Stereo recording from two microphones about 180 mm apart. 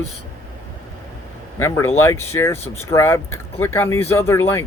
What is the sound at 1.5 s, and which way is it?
Speech, 15° left (ahead or behind).